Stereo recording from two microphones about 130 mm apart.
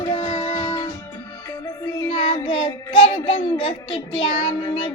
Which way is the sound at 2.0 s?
40° left (ahead or behind).